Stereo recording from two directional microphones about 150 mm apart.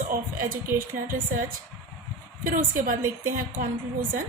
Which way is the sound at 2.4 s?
65° right (ahead or behind).